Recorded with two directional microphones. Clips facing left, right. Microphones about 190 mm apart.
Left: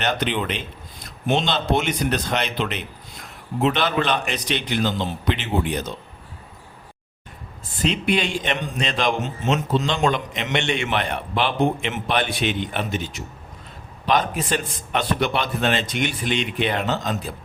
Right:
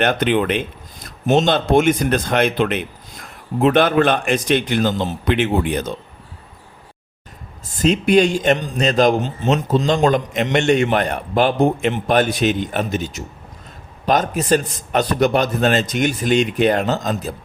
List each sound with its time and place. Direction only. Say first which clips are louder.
0.0 s a man's voice: right 7 dB; 55° right (ahead or behind)
7.8 s a man's voice: right 8 dB; 45° right (ahead or behind)